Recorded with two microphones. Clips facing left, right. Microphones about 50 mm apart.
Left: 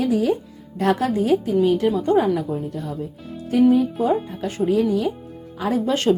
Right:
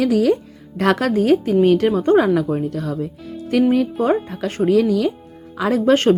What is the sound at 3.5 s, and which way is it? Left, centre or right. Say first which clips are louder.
Speech: even; right.